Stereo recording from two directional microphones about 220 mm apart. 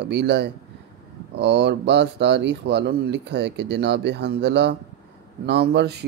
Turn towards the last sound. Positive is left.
turn(degrees=-50)  # may be behind; listen again after turning